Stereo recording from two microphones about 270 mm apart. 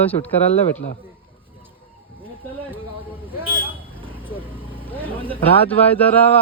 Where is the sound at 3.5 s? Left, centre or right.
Centre.